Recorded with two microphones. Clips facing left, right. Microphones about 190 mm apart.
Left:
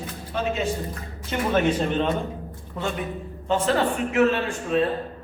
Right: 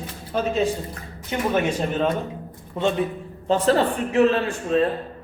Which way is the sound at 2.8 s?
25° right (ahead or behind).